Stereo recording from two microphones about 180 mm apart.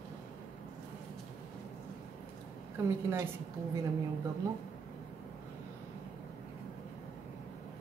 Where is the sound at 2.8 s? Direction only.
15° right (ahead or behind).